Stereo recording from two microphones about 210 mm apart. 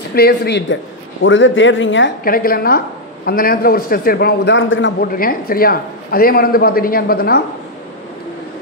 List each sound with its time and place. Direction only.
0.1 s a man's voice: 50° left (ahead or behind)
1.2 s speech: 65° left (ahead or behind)
2.2 s a man's voice: 45° left (ahead or behind); by 4.9 s 65° left (ahead or behind)
5.0 s a man's voice: 45° left (ahead or behind)